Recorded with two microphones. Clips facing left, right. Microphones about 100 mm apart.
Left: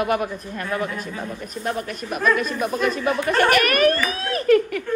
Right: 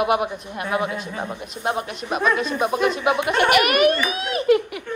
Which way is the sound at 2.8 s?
20° right (ahead or behind).